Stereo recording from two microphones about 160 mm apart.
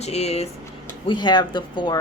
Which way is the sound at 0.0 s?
40° left (ahead or behind).